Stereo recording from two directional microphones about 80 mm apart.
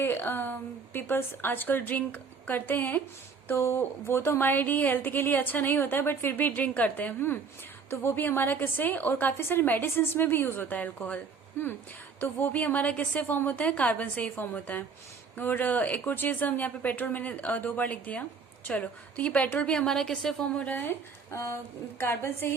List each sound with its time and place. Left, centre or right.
0.0 s speech: left
3.5 s a woman's voice: left
21.2 s a woman's voice: left